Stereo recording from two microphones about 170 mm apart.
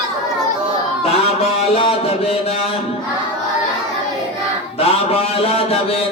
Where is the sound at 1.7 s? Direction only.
35° left (ahead or behind).